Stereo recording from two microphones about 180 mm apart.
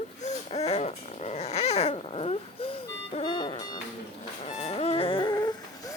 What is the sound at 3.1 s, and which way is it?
Music, 25° left (ahead or behind).